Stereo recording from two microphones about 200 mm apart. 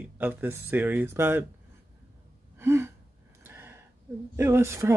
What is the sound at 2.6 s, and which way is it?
Speech, 10° right (ahead or behind).